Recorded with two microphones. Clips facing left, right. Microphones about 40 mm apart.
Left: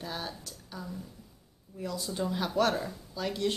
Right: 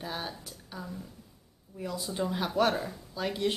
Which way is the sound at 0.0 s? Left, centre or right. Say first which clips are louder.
Right 1 dB; centre.